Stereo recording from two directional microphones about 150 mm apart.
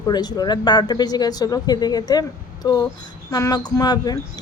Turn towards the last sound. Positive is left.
turn(degrees=25)  # may be behind; listen again after turning